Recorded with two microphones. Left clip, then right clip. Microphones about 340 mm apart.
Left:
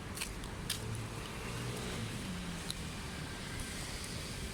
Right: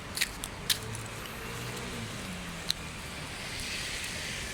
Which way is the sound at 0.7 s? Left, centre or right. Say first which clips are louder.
Right 11 dB; centre.